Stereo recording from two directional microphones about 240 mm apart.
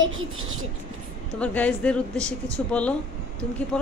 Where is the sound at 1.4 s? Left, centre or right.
Centre.